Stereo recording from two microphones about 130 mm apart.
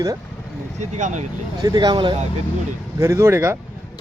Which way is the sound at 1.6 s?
30° right (ahead or behind).